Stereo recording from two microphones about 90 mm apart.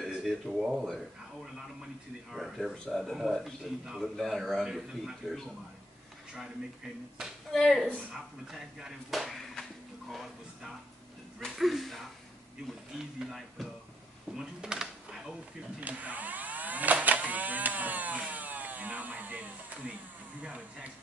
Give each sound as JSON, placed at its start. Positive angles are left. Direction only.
{"t": 0.0, "sound": "speech", "side_deg": 0}
{"t": 7.2, "sound": "speech", "side_deg": 0}
{"t": 11.3, "sound": "speech", "side_deg": 0}
{"t": 14.3, "sound": "a sound", "side_deg": -10}
{"t": 15.8, "sound": "a sound", "side_deg": -15}
{"t": 20.4, "sound": "speech", "side_deg": -15}